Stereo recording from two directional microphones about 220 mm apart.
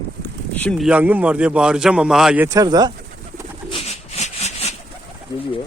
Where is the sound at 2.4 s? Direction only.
15° right (ahead or behind).